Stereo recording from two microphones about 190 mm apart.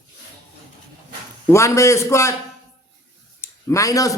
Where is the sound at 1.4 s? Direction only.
15° left (ahead or behind).